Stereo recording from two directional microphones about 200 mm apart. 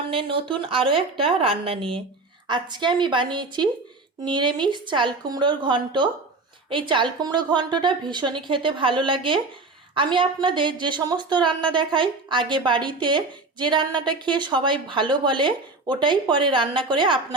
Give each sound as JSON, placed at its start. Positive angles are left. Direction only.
{"t": 0.1, "sound": "a woman's voice", "side_deg": -25}